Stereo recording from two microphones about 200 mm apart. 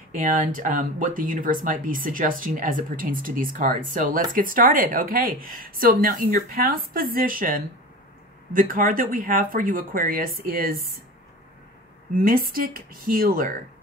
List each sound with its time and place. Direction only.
0.1 s speech: 40° right (ahead or behind)
12.2 s speech: 45° right (ahead or behind)